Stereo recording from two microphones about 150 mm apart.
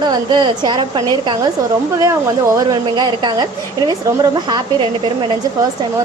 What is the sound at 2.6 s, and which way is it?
A woman's voice, 25° right (ahead or behind).